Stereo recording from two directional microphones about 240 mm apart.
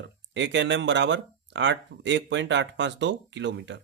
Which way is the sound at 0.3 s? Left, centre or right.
Right.